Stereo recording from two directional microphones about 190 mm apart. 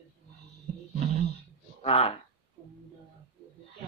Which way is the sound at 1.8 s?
30° left (ahead or behind).